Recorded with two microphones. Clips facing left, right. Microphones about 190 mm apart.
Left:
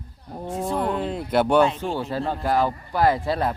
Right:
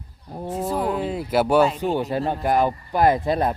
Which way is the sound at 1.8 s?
15° right (ahead or behind).